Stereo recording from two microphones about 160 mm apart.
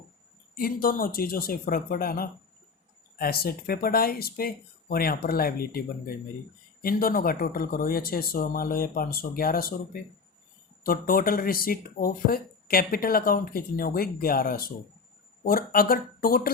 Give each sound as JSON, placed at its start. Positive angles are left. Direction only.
{"t": 0.5, "sound": "speech", "side_deg": 65}